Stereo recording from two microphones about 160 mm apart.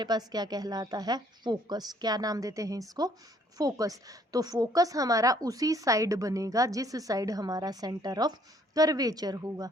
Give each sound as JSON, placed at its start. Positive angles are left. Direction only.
{"t": 0.0, "sound": "a woman's voice", "side_deg": -25}